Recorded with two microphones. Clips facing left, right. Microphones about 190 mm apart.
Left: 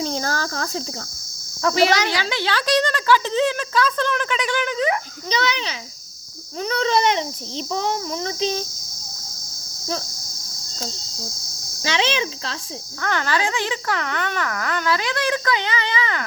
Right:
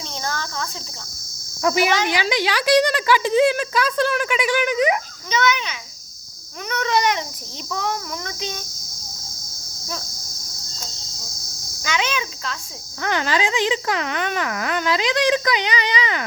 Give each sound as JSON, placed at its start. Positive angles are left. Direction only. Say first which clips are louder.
{"t": 0.0, "sound": "cricket", "louder": "left 5 dB", "side_deg": 35}
{"t": 2.0, "sound": "speech", "louder": "right 2 dB", "side_deg": -15}
{"t": 5.3, "sound": "a child's voice", "louder": "right 2 dB", "side_deg": 35}
{"t": 6.6, "sound": "a sound", "louder": "left 2 dB", "side_deg": 30}
{"t": 11.8, "sound": "a sound", "louder": "left 2 dB", "side_deg": 30}
{"t": 13.0, "sound": "speech", "louder": "right 1 dB", "side_deg": -15}